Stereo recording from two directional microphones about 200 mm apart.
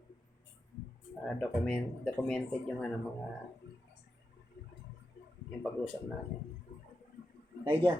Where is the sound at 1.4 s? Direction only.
5° left (ahead or behind).